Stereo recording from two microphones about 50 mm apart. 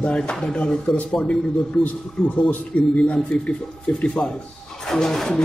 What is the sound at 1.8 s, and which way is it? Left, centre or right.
Speech, centre.